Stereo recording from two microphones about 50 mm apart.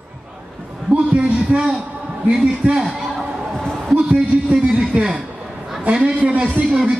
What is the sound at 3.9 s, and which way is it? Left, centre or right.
A man's voice, right.